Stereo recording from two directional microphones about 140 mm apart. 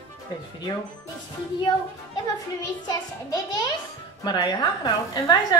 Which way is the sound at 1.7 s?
30° left (ahead or behind).